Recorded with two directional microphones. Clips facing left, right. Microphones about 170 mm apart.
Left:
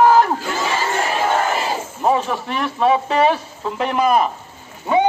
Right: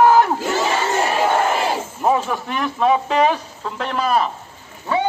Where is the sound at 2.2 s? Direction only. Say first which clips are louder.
Even; centre (ahead or behind).